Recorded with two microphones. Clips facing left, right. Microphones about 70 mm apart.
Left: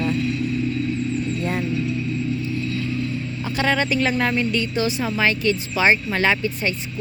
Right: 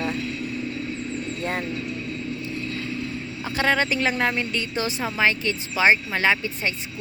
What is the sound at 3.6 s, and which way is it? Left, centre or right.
A woman's voice, right.